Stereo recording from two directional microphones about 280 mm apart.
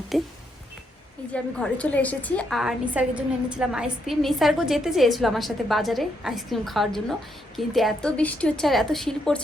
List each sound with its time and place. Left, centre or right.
0.1 s a woman's voice: centre
1.3 s a woman's voice: centre